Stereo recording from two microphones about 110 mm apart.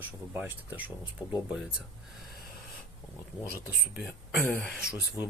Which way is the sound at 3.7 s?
Centre (ahead or behind).